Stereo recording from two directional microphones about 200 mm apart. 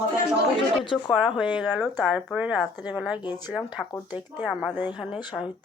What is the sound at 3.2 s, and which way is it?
Speech, 20° left (ahead or behind).